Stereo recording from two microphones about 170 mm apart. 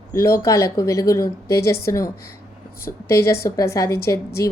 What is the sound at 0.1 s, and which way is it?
A woman's voice, 15° left (ahead or behind).